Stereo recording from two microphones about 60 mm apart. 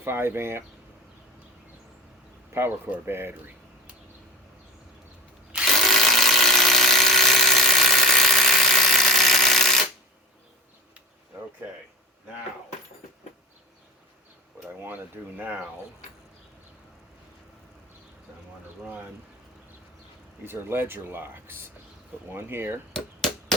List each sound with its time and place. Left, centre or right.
0.0 s speech: right
2.5 s speech: right
5.5 s a sound: centre
5.9 s electric toothbrush: centre
14.8 s speech: right
20.4 s speech: right
22.9 s chop: centre